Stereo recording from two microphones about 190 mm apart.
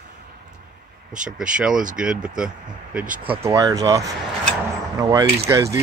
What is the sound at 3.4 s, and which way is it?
Speech, 15° right (ahead or behind).